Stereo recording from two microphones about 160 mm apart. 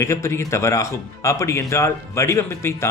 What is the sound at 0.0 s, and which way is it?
Speech, 15° left (ahead or behind).